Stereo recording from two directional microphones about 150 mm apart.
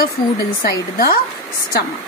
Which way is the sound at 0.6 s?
85° left.